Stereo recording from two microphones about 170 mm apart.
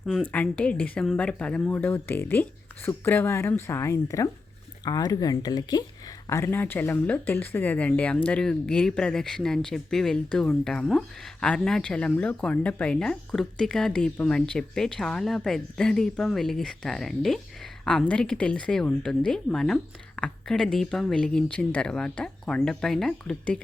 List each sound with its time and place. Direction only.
0.2 s speech: 10° left (ahead or behind)